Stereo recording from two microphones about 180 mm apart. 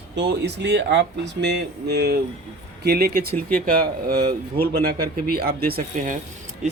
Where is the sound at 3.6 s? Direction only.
55° right (ahead or behind).